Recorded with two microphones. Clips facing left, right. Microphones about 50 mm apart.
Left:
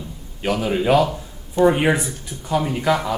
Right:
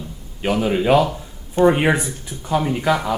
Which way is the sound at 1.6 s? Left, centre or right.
Right.